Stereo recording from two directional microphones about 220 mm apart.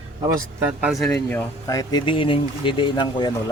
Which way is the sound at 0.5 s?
5° right (ahead or behind).